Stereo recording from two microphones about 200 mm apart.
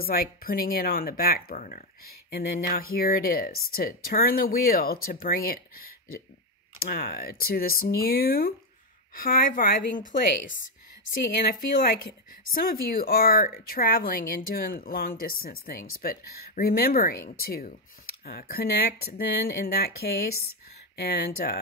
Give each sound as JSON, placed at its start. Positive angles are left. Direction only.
{"t": 0.0, "sound": "speech", "side_deg": 50}
{"t": 6.8, "sound": "speech", "side_deg": 50}
{"t": 12.5, "sound": "speech", "side_deg": 45}